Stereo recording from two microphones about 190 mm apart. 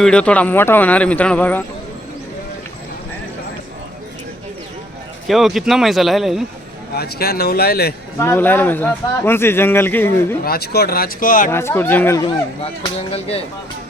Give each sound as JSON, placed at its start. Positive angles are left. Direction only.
{"t": 0.0, "sound": "a man's voice", "side_deg": 5}
{"t": 5.3, "sound": "a man's voice", "side_deg": 0}
{"t": 6.9, "sound": "speech", "side_deg": 55}
{"t": 8.2, "sound": "a man's voice", "side_deg": 10}
{"t": 10.4, "sound": "speech", "side_deg": 55}
{"t": 11.5, "sound": "a man's voice", "side_deg": 10}
{"t": 13.1, "sound": "speech", "side_deg": 30}